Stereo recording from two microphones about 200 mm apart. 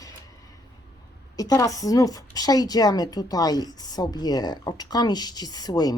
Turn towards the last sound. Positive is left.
turn(degrees=20)  # may be behind; listen again after turning